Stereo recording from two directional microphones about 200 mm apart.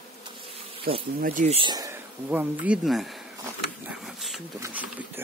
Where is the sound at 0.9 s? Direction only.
50° right (ahead or behind); by 3.3 s centre (ahead or behind).